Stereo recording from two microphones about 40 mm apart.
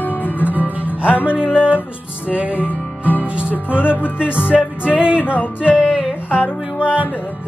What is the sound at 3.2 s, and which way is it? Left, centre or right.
Music, right.